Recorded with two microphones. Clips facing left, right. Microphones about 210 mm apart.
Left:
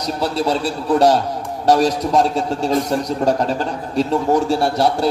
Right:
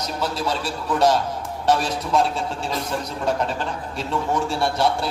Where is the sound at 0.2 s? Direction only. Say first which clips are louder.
Left 6 dB; 35° left (ahead or behind).